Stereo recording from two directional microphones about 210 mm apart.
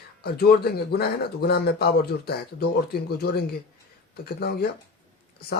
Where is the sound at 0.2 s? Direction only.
50° left (ahead or behind).